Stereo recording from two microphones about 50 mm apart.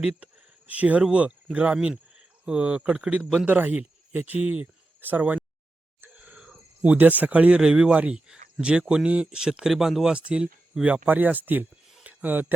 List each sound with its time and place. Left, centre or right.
0.7 s speech: right
3.4 s speech: right
5.2 s a sound: right
6.8 s speech: right; by 10.1 s centre
10.1 s speech: right
10.8 s speech: right